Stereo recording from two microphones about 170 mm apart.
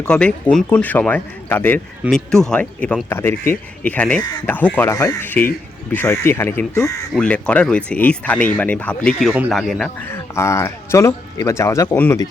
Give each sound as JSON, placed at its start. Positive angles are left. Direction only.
{"t": 0.0, "sound": "speech", "side_deg": 5}
{"t": 10.1, "sound": "speech", "side_deg": 15}